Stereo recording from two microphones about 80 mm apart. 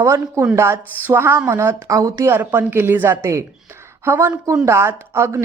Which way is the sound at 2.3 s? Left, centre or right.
Right.